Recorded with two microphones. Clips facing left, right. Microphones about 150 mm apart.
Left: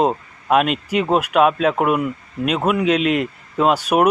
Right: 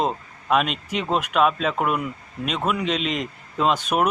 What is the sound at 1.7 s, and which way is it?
Speech, 50° left (ahead or behind).